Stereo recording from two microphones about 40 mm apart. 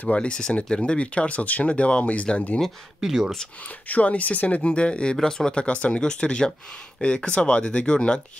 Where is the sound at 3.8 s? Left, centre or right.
Left.